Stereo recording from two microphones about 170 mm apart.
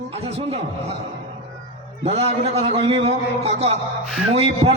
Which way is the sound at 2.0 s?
40° right (ahead or behind).